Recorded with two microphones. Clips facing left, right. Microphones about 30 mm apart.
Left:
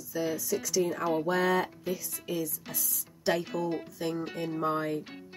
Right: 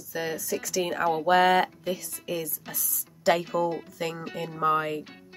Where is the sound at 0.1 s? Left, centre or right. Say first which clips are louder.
Right 1 dB; right.